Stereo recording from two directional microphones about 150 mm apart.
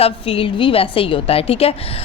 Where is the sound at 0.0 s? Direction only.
40° left (ahead or behind).